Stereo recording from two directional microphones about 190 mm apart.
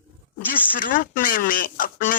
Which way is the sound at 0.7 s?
45° left (ahead or behind).